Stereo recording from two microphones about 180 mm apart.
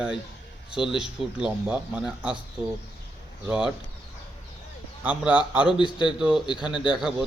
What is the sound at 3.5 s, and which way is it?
Speech, 5° right (ahead or behind).